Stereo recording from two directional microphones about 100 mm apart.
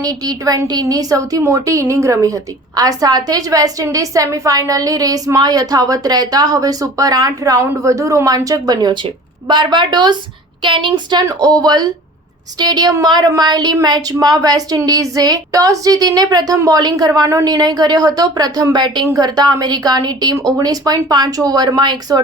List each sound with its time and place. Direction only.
0.0 s a woman's voice: 40° right (ahead or behind)
11.3 s a woman's voice: 35° right (ahead or behind)